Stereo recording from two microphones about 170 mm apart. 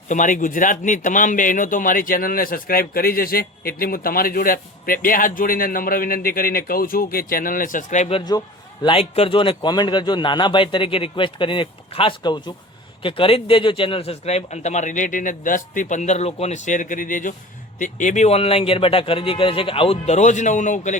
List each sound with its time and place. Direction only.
0.1 s a man's voice: 50° left (ahead or behind)